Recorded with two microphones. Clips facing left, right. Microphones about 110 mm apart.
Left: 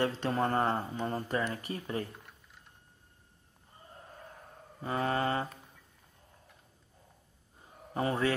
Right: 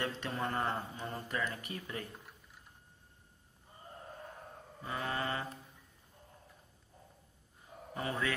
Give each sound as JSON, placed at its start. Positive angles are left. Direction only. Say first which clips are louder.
{"t": 0.0, "sound": "speech", "louder": "left 7 dB", "side_deg": 35}
{"t": 4.8, "sound": "speech", "louder": "left 7 dB", "side_deg": 40}
{"t": 7.9, "sound": "a man's voice", "louder": "left 6 dB", "side_deg": 35}